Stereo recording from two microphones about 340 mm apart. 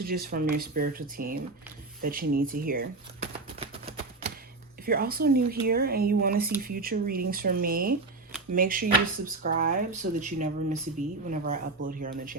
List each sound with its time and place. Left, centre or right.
0.0 s speech: right
2.0 s typewriter: right
4.9 s speech: right